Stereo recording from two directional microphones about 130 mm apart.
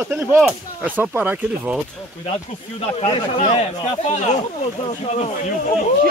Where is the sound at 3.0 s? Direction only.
50° left (ahead or behind).